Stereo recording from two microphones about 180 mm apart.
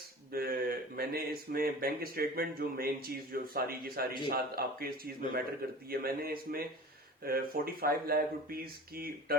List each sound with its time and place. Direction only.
0.3 s speech: 55° right (ahead or behind)